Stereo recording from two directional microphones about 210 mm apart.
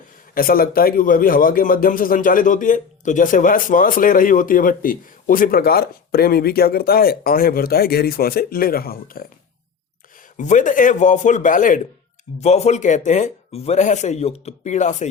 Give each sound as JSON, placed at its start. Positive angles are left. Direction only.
{"t": 0.3, "sound": "a man's voice", "side_deg": 45}
{"t": 10.3, "sound": "speech", "side_deg": 35}